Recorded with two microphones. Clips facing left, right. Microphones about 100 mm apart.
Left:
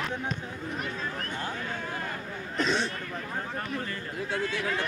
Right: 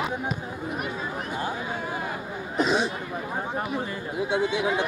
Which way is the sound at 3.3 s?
25° right (ahead or behind).